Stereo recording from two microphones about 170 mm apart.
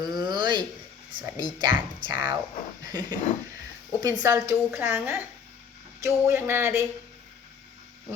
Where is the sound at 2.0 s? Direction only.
25° right (ahead or behind).